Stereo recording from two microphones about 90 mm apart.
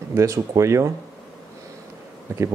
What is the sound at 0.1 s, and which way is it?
Speech, 35° right (ahead or behind).